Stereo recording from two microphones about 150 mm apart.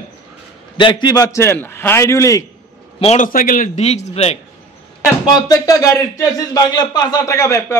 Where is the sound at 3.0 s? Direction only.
55° left (ahead or behind).